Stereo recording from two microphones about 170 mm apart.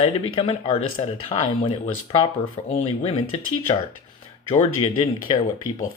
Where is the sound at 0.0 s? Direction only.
35° left (ahead or behind).